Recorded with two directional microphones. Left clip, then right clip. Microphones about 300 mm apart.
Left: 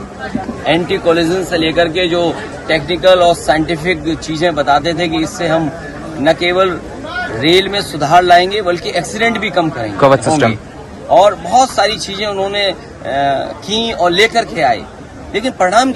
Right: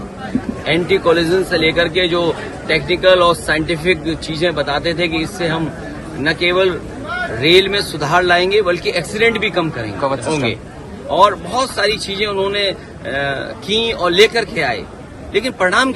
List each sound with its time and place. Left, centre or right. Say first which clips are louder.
0.6 s speech: left 2 dB; centre
10.0 s speech: left 9 dB; left
11.2 s speech: left 3 dB; centre